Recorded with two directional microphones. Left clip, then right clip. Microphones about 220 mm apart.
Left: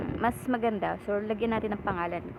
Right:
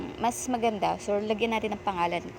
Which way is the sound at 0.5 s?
Centre (ahead or behind).